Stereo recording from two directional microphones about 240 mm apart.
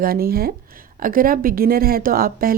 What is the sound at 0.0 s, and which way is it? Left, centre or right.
Speech, right.